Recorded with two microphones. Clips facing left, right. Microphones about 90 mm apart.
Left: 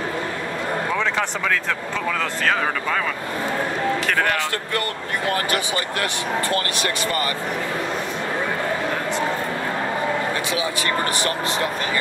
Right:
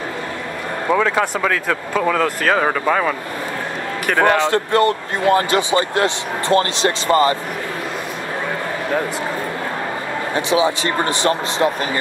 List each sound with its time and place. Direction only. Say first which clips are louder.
0.9 s speech: right 5 dB; 10° right (ahead or behind)
4.1 s speech: right 7 dB; 20° right (ahead or behind)
10.3 s speech: right 7 dB; 25° right (ahead or behind)